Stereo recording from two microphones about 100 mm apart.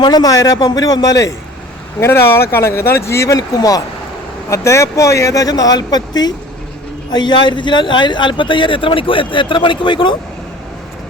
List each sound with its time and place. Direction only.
0.0 s speech: 40° left (ahead or behind)
2.0 s speech: 25° left (ahead or behind); by 10.2 s 50° left (ahead or behind)